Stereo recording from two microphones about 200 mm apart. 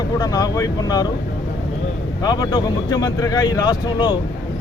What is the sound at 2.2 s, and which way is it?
Speech, 20° left (ahead or behind).